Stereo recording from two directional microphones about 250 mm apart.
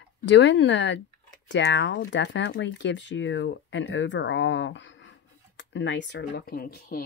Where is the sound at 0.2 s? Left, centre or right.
Left.